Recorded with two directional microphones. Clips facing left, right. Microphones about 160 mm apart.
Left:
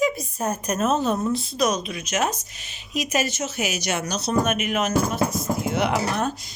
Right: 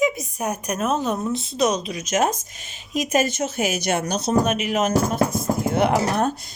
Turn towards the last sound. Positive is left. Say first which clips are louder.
# right 3 dB
turn(degrees=-45)  # may be behind; listen again after turning